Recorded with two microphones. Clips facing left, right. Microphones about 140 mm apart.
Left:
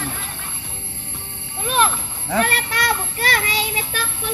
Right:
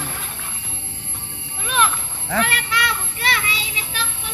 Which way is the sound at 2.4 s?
40° left (ahead or behind).